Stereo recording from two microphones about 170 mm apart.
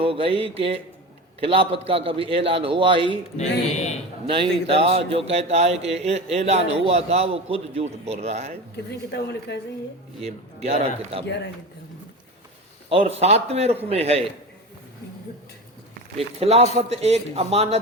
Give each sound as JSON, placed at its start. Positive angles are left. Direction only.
{"t": 0.0, "sound": "speech", "side_deg": -35}
{"t": 4.3, "sound": "speech", "side_deg": -30}
{"t": 8.7, "sound": "a woman's voice", "side_deg": 75}
{"t": 10.2, "sound": "speech", "side_deg": -40}
{"t": 11.3, "sound": "a man's voice", "side_deg": 90}
{"t": 12.9, "sound": "speech", "side_deg": -35}
{"t": 16.1, "sound": "speech", "side_deg": -35}